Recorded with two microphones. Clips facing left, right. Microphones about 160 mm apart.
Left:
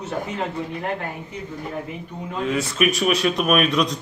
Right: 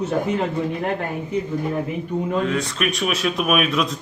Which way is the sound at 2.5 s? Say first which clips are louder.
Left 2 dB; 5° left (ahead or behind).